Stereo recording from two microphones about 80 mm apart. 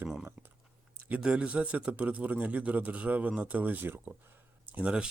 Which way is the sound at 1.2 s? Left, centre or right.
Centre.